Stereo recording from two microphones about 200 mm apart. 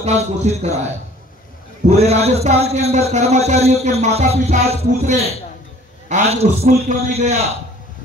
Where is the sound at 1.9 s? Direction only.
30° right (ahead or behind).